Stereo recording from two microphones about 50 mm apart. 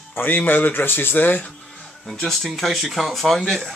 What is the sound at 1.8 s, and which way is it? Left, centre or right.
Speech, centre.